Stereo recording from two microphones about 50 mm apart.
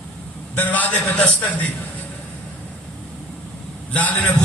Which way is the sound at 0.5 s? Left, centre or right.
Left.